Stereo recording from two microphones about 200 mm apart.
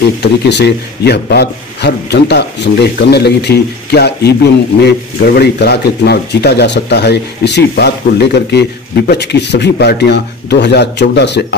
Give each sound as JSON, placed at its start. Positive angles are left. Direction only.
{"t": 0.2, "sound": "a man's voice", "side_deg": 60}